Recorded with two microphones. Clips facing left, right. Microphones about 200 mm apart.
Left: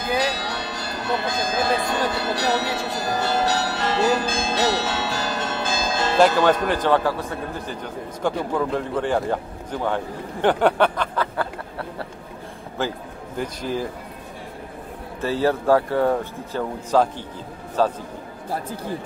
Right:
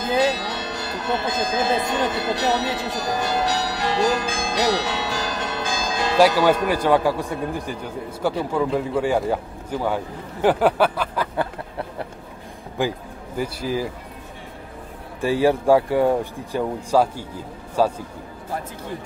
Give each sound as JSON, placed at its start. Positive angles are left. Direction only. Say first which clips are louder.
{"t": 0.1, "sound": "music", "louder": "right 3 dB", "side_deg": -25}
{"t": 1.2, "sound": "speech", "louder": "right 1 dB", "side_deg": -20}
{"t": 12.8, "sound": "speech", "louder": "right 3 dB", "side_deg": -15}
{"t": 15.1, "sound": "speech", "louder": "right 3 dB", "side_deg": -15}